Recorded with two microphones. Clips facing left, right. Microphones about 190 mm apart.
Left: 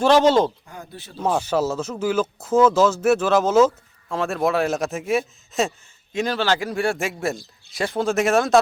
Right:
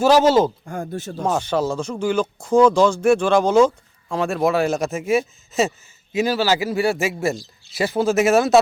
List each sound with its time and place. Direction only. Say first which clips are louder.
0.0 s speech: right 1 dB; 5° right (ahead or behind)
0.6 s speech: right 11 dB; 50° right (ahead or behind)
1.2 s speech: even; 5° left (ahead or behind)